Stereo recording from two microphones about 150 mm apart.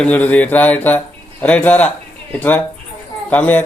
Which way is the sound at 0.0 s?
10° left (ahead or behind).